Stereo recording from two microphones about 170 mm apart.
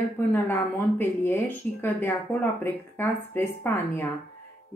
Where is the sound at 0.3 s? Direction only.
10° left (ahead or behind).